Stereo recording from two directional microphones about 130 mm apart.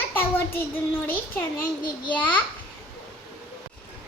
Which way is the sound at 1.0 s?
15° left (ahead or behind).